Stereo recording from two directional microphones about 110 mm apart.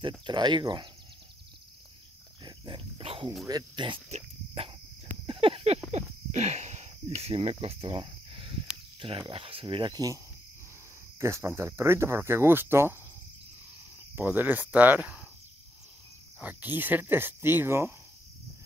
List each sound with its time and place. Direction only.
0.3 s speech: 45° right (ahead or behind)
2.4 s speech: 45° right (ahead or behind)
3.4 s speech: 40° right (ahead or behind)
5.2 s a sound: 50° right (ahead or behind)
6.3 s speech: 90° right; by 9.9 s 50° right (ahead or behind)
9.9 s cricket: 30° right (ahead or behind)
11.1 s speech: 25° right (ahead or behind)
14.1 s speech: 15° right (ahead or behind)
16.3 s speech: 15° right (ahead or behind)